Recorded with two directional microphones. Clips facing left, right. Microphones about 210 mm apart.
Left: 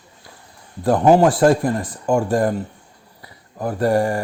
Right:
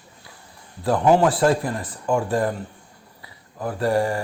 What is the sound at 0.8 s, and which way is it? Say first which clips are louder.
Speech: left 4 dB; 45° left (ahead or behind).